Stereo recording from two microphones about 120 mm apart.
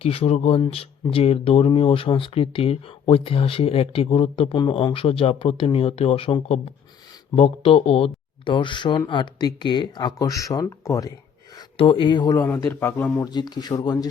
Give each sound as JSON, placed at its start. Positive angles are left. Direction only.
{"t": 0.0, "sound": "speech", "side_deg": 55}
{"t": 11.8, "sound": "speech", "side_deg": 45}
{"t": 12.5, "sound": "a man's voice", "side_deg": 20}
{"t": 13.1, "sound": "speech", "side_deg": 35}